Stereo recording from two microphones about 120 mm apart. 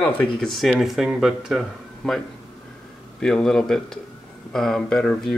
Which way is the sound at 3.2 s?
5° left (ahead or behind).